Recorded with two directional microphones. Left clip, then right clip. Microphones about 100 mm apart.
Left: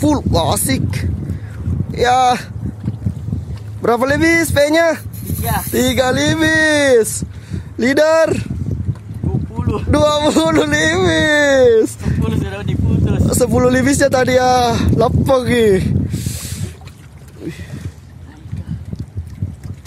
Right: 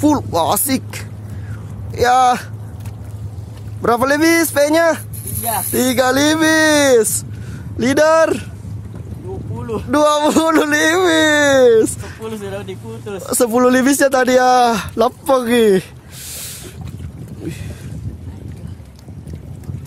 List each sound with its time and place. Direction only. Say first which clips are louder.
0.0 s speech: right 1 dB; 20° left (ahead or behind)
3.8 s speech: even; 15° left (ahead or behind)
5.4 s speech: even; 5° left (ahead or behind)
5.7 s speech: even; 20° left (ahead or behind)
7.5 s speech: left 1 dB; 20° left (ahead or behind)
9.6 s a man's voice: even; 25° left (ahead or behind)
16.1 s a sound: left 3 dB; 15° left (ahead or behind)